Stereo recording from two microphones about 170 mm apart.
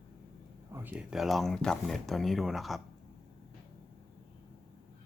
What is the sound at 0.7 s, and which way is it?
Speech, 5° right (ahead or behind).